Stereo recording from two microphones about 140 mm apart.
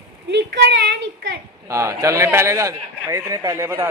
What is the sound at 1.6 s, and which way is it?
A man's voice, 20° right (ahead or behind).